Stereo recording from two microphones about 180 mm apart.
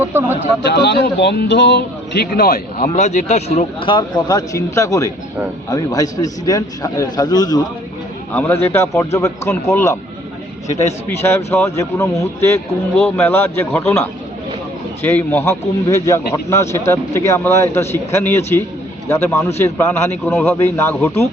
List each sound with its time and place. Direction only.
0.0 s speech: 10° right (ahead or behind)
0.6 s a man's voice: 70° left (ahead or behind)
2.9 s a man's voice: 40° left (ahead or behind); by 7.6 s 20° left (ahead or behind)
8.3 s speech: 10° left (ahead or behind)
11.2 s speech: 15° left (ahead or behind)